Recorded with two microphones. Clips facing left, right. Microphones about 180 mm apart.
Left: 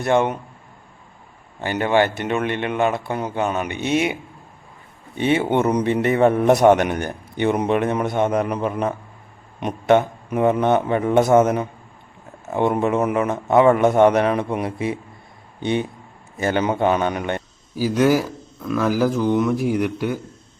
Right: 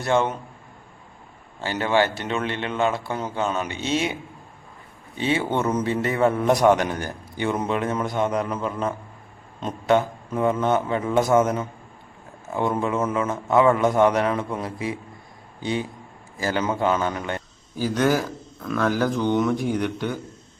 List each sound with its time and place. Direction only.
0.0 s speech: 15° left (ahead or behind)
1.6 s speech: 15° left (ahead or behind)
2.4 s speech: 55° left (ahead or behind)
2.7 s speech: 15° left (ahead or behind)
3.7 s speech: 55° left (ahead or behind)
5.4 s a man's voice: 20° left (ahead or behind)
17.7 s speech: 10° left (ahead or behind)